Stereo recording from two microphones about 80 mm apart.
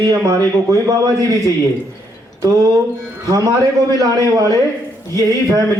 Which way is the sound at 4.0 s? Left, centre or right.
Right.